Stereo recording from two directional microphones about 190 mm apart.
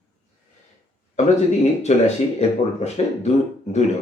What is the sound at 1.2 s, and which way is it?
Speech, 40° left (ahead or behind).